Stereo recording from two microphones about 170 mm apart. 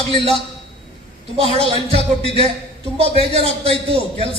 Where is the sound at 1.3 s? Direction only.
35° right (ahead or behind).